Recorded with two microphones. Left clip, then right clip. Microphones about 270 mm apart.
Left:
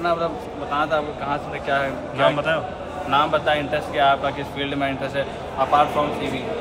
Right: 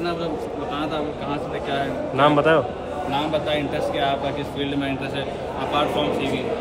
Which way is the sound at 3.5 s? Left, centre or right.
Left.